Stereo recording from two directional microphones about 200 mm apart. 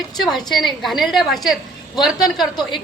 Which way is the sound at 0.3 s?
Centre (ahead or behind).